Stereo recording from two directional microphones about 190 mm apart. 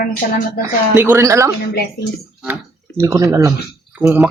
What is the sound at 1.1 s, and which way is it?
Speech, 15° right (ahead or behind).